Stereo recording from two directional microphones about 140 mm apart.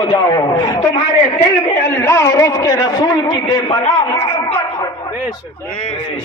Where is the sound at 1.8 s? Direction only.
20° left (ahead or behind); by 4.6 s 40° left (ahead or behind).